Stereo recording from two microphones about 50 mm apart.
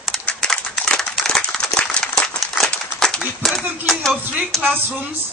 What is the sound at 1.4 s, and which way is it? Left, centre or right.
Clapping, centre.